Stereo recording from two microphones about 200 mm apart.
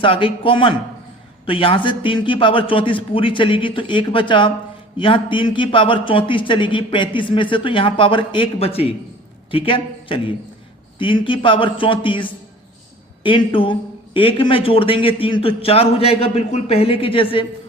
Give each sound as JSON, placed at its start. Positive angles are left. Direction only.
{"t": 0.0, "sound": "a man's voice", "side_deg": 25}